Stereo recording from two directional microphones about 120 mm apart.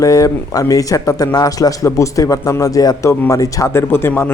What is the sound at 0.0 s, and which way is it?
A man's voice, 30° left (ahead or behind).